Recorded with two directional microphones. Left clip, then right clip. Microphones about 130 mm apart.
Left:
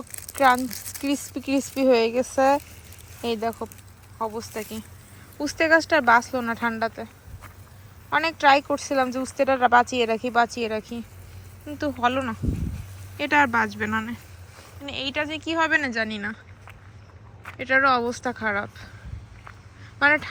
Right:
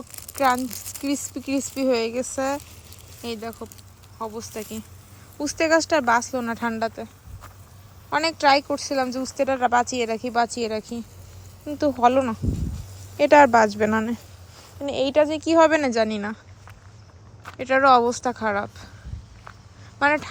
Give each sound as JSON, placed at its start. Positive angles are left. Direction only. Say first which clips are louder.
{"t": 0.3, "sound": "speech", "louder": "left 2 dB", "side_deg": -10}
{"t": 8.1, "sound": "speech", "louder": "even", "side_deg": -20}
{"t": 11.6, "sound": "speech", "louder": "right 5 dB", "side_deg": -25}
{"t": 13.3, "sound": "speech", "louder": "right 6 dB", "side_deg": -60}
{"t": 14.8, "sound": "speech", "louder": "right 8 dB", "side_deg": -40}
{"t": 17.6, "sound": "speech", "louder": "right 3 dB", "side_deg": -25}
{"t": 20.0, "sound": "speech", "louder": "left 1 dB", "side_deg": -20}